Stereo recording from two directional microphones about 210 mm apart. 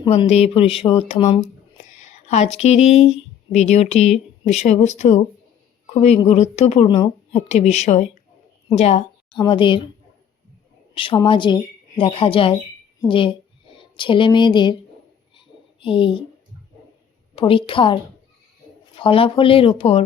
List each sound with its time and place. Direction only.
0.0 s a woman's voice: 25° left (ahead or behind)
10.9 s speech: 25° left (ahead or behind)
15.4 s a sound: 25° left (ahead or behind)
17.3 s speech: 25° left (ahead or behind)